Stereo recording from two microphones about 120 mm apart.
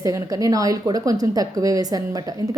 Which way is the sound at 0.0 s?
30° right (ahead or behind).